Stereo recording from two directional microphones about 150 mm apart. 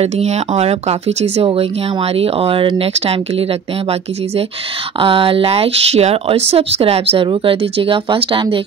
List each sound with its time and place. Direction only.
0.0 s speech: 45° right (ahead or behind)
5.0 s speech: 35° right (ahead or behind)